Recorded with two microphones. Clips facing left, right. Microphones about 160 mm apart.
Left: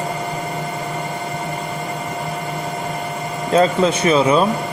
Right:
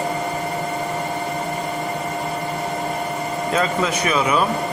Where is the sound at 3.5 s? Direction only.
30° left (ahead or behind).